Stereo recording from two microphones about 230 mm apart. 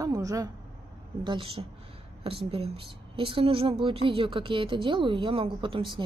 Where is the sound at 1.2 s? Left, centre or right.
Right.